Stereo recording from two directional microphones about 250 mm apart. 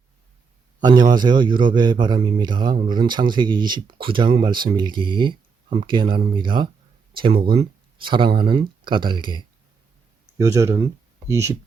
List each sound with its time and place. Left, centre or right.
0.8 s speech: centre